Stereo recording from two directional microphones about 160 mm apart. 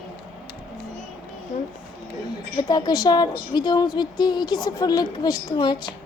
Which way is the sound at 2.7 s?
25° left (ahead or behind).